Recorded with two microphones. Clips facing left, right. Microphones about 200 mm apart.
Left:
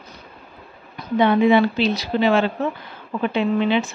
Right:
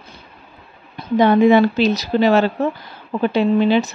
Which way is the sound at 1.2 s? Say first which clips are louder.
Right 3 dB; 45° right (ahead or behind).